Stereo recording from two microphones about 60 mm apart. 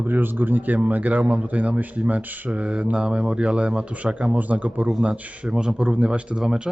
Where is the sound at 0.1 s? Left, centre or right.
Right.